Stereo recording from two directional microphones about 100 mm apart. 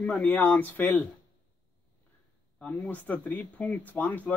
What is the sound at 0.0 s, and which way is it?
Speech, 15° left (ahead or behind).